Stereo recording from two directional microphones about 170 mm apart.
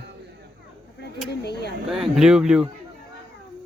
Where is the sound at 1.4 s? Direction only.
75° left (ahead or behind).